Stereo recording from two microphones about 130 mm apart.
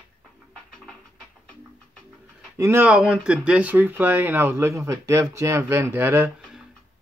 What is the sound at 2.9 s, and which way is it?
Speech, 5° right (ahead or behind).